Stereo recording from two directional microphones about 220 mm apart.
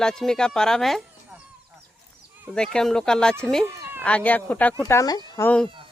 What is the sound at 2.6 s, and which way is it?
Speech, 5° left (ahead or behind).